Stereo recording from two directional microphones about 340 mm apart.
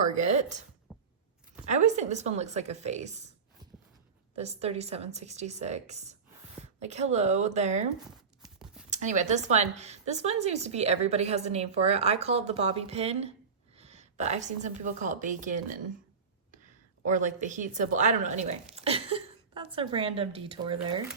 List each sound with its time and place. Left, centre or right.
0.0 s speech: right
0.9 s a sound: centre
1.6 s speech: right
4.4 s speech: centre
8.4 s clip-clop: centre
8.9 s a woman's voice: right
17.1 s a woman's voice: right